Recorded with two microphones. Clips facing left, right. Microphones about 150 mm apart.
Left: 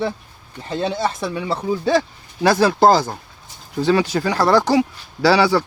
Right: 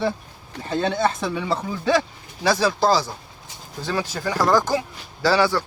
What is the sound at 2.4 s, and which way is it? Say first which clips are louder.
Speech: left 5 dB; 55° left (ahead or behind).